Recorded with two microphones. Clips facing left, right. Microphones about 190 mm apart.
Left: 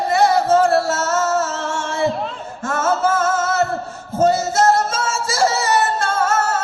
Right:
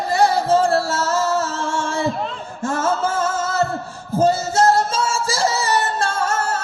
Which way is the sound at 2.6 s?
30° right (ahead or behind).